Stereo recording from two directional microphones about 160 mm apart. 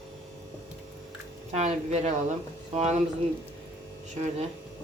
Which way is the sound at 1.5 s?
45° right (ahead or behind).